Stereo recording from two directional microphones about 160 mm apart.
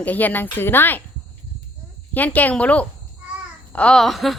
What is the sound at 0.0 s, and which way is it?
A woman's voice, 10° left (ahead or behind).